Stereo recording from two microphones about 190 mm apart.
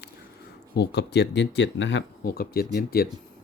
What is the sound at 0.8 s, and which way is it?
Speech, 60° left (ahead or behind).